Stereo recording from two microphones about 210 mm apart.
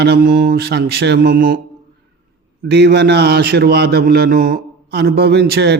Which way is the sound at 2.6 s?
55° right (ahead or behind).